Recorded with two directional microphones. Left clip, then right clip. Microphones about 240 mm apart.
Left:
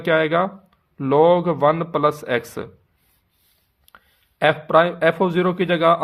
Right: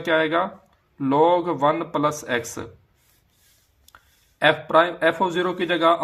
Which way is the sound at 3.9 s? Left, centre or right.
Left.